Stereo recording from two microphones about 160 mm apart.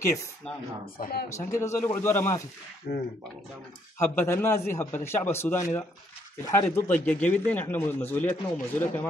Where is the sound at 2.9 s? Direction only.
60° left (ahead or behind).